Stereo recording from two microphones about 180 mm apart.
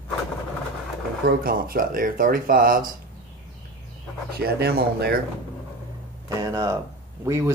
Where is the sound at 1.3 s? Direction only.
55° right (ahead or behind).